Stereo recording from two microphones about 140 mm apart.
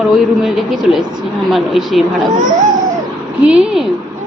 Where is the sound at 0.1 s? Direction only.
Centre (ahead or behind).